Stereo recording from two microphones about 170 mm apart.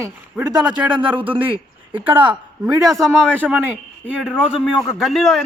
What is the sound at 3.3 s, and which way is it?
A man's voice, 10° right (ahead or behind).